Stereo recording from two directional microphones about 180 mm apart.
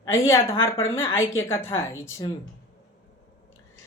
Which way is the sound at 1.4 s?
15° left (ahead or behind).